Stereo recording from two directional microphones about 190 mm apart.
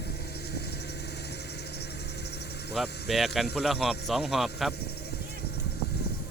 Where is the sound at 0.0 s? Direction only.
60° left (ahead or behind).